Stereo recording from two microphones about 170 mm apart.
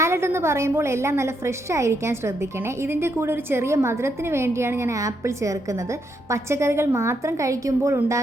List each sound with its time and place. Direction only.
0.0 s a woman's voice: 15° right (ahead or behind)